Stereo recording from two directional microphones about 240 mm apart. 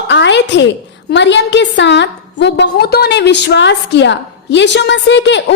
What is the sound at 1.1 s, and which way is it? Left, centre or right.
A woman's voice, left.